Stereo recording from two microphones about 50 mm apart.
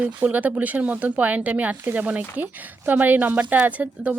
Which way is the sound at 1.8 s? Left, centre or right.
Right.